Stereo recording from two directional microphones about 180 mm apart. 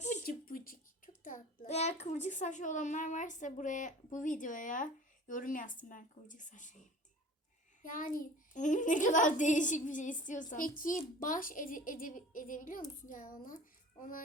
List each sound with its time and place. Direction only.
0.0 s a child's voice: 45° left (ahead or behind)